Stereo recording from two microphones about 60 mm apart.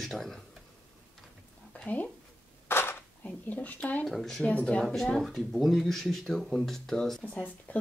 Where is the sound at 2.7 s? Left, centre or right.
Left.